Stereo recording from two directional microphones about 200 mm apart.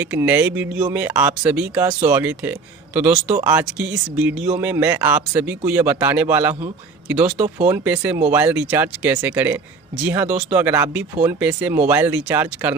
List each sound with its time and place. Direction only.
0.0 s speech: 10° right (ahead or behind)
7.3 s speech: 35° right (ahead or behind)
7.6 s speech: 10° right (ahead or behind)